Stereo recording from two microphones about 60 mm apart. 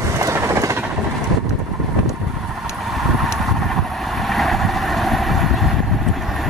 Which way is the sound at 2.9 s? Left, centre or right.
Centre.